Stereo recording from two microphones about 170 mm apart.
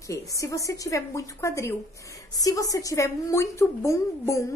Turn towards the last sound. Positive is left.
turn(degrees=15)  # may be behind; listen again after turning